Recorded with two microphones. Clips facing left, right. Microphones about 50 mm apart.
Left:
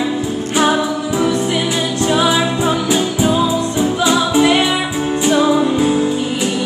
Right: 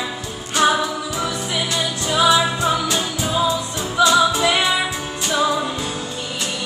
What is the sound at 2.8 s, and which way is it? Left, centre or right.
Music, centre.